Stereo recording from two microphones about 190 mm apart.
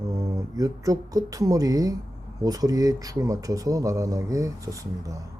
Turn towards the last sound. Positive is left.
turn(degrees=-15)  # may be behind; listen again after turning